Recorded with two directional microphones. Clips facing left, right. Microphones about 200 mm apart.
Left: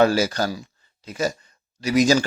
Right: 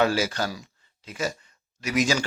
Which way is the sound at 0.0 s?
40° left (ahead or behind).